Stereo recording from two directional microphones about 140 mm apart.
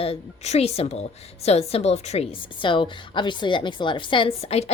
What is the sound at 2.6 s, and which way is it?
A woman's voice, 35° left (ahead or behind).